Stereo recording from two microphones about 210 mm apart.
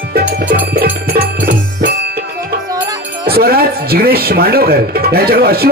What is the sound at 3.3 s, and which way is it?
Speech, 45° right (ahead or behind).